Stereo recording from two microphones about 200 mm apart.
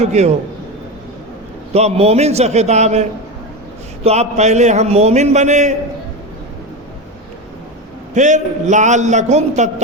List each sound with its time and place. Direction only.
0.0 s a man's voice: 35° right (ahead or behind)
1.7 s a man's voice: 30° right (ahead or behind)
8.1 s a man's voice: 35° right (ahead or behind)